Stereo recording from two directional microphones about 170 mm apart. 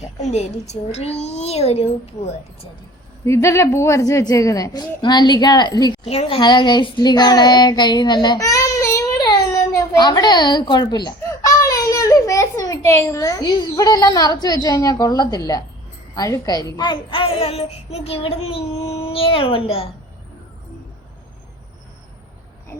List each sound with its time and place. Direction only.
0.2 s child singing: 40° left (ahead or behind)
3.2 s a woman's voice: 15° left (ahead or behind)
6.1 s child singing: 35° left (ahead or behind)
6.4 s child singing: 25° left (ahead or behind)
16.1 s a woman's voice: 20° left (ahead or behind)
16.6 s child singing: 25° left (ahead or behind)